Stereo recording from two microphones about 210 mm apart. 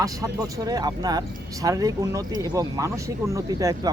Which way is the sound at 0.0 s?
15° right (ahead or behind).